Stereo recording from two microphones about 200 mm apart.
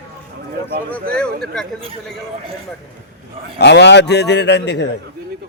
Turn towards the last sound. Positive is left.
turn(degrees=60)  # may be behind; listen again after turning